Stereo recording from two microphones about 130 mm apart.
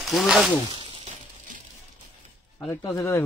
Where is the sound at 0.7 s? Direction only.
40° right (ahead or behind).